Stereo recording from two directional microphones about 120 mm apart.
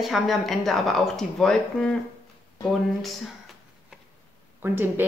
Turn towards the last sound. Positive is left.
turn(degrees=-20)  # may be behind; listen again after turning